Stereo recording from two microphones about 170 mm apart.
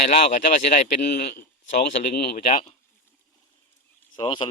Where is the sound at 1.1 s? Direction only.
75° left (ahead or behind).